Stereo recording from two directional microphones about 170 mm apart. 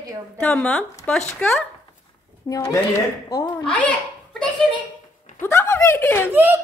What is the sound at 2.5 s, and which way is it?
Speech, 20° left (ahead or behind).